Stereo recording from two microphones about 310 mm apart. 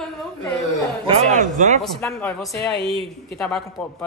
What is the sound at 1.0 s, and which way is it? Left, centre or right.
Speech, right.